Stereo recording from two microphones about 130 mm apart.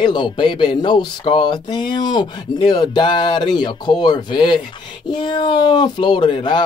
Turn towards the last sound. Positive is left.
turn(degrees=35)  # may be behind; listen again after turning